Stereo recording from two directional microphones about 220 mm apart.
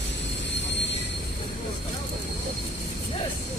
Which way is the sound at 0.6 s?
55° left (ahead or behind).